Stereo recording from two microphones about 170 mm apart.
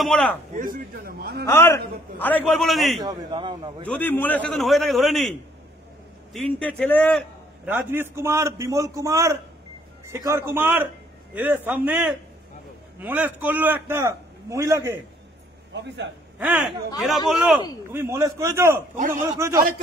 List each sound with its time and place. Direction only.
0.0 s a man's voice: 5° left (ahead or behind)
0.5 s a man's voice: 50° right (ahead or behind)
1.4 s a man's voice: 15° left (ahead or behind)
3.0 s a man's voice: 25° right (ahead or behind)
3.8 s a man's voice: 10° left (ahead or behind)
6.3 s a man's voice: 5° left (ahead or behind)
7.6 s a man's voice: 10° right (ahead or behind)
16.3 s a man's voice: 10° right (ahead or behind)
17.9 s a man's voice: 15° right (ahead or behind)
18.9 s a man's voice: 50° right (ahead or behind)
19.2 s a man's voice: 20° right (ahead or behind)